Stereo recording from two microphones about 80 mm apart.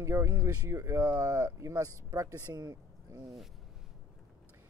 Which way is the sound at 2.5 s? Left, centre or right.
Right.